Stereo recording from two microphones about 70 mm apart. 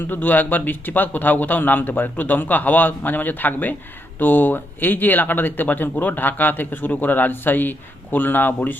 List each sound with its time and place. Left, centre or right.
0.0 s speech: left